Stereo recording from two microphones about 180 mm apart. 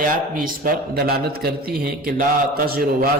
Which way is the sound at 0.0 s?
50° right (ahead or behind).